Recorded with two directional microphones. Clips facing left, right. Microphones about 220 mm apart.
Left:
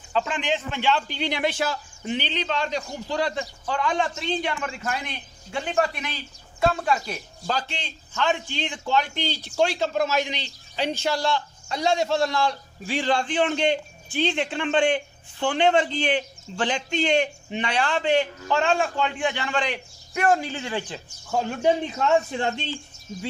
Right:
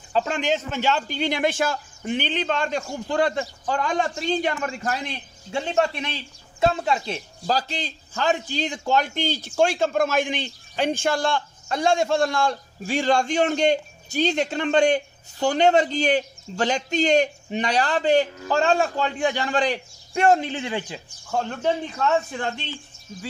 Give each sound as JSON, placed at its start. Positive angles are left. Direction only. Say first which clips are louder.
{"t": 0.1, "sound": "a man's voice", "louder": "right 2 dB", "side_deg": -40}
{"t": 7.1, "sound": "a man's voice", "louder": "right 4 dB", "side_deg": -35}
{"t": 20.2, "sound": "speech", "louder": "right 3 dB", "side_deg": -25}
{"t": 21.3, "sound": "speech", "louder": "left 2 dB", "side_deg": 10}
{"t": 21.9, "sound": "a man's voice", "louder": "left 1 dB", "side_deg": 25}